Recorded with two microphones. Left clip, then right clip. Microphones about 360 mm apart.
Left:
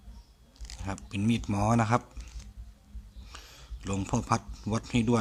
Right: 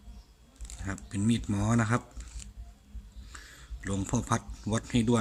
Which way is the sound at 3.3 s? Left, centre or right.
Centre.